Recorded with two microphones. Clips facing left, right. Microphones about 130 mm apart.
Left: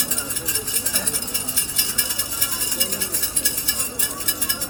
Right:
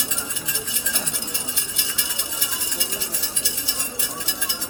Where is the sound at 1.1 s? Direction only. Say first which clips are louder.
Left 1 dB; 45° left (ahead or behind).